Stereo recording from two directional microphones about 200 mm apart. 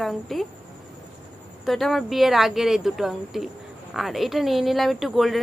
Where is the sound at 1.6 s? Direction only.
Centre (ahead or behind).